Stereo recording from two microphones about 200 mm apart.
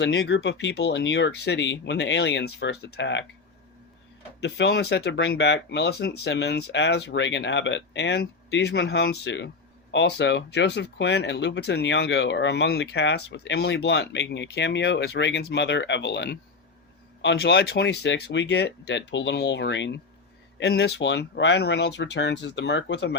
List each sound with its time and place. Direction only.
0.0 s speech: 60° left (ahead or behind)
4.4 s speech: 60° left (ahead or behind)